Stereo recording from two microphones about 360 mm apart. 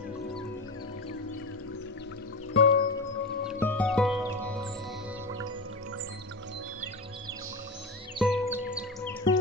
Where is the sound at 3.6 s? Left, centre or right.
Centre.